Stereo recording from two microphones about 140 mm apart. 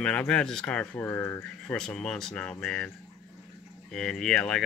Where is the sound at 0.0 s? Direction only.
10° left (ahead or behind).